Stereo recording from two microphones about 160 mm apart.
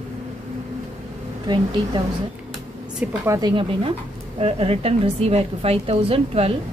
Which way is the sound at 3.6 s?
35° right (ahead or behind).